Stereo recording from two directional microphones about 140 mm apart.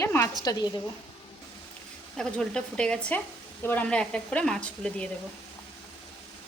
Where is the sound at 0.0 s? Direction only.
20° left (ahead or behind).